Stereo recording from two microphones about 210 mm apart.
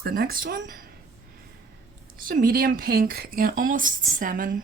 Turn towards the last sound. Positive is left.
turn(degrees=-40)  # may be behind; listen again after turning